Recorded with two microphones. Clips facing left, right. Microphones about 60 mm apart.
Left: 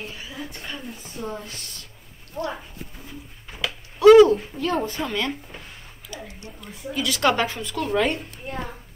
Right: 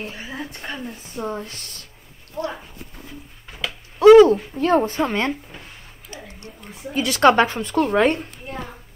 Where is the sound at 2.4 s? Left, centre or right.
Centre.